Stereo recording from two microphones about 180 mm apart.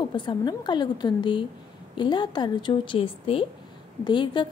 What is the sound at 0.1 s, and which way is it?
A woman's voice, 25° left (ahead or behind).